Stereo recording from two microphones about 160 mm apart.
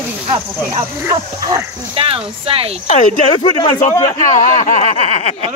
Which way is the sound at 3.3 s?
25° left (ahead or behind).